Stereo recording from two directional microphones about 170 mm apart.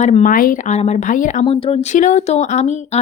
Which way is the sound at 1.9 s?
45° left (ahead or behind).